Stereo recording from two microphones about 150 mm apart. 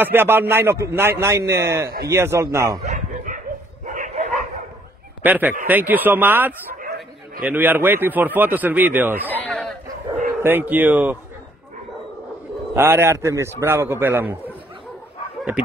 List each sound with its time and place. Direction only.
0.0 s speech: 15° right (ahead or behind)
2.8 s bow-wow: 55° right (ahead or behind)
5.2 s speech: 10° right (ahead or behind)
9.5 s a sound: 5° left (ahead or behind)
10.4 s speech: 10° right (ahead or behind)
12.7 s speech: 15° right (ahead or behind)